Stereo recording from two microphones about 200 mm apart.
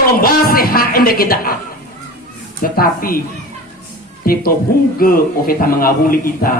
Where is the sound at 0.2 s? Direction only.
45° left (ahead or behind).